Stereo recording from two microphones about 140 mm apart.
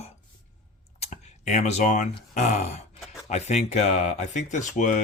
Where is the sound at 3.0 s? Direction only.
Centre (ahead or behind).